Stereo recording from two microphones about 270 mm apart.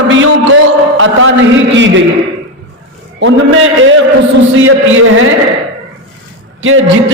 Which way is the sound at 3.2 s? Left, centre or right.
Right.